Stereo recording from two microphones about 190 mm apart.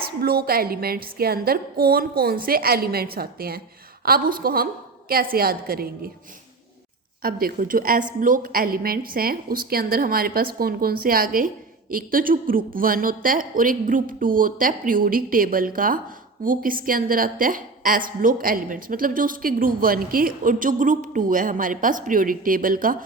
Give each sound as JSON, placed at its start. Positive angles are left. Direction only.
{"t": 0.2, "sound": "a woman's voice", "side_deg": -50}
{"t": 7.2, "sound": "a woman's voice", "side_deg": -50}